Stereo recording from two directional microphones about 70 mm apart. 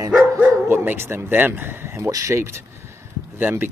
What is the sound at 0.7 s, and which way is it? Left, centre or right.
Speech, right.